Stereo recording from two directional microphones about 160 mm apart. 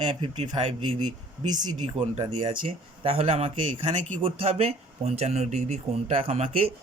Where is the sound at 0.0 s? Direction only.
30° right (ahead or behind).